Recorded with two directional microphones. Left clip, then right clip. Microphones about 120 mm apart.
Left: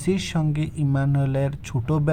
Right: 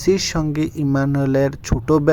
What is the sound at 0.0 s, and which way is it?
Speech, 35° right (ahead or behind).